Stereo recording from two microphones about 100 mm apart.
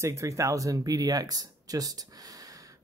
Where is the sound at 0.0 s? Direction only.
30° right (ahead or behind).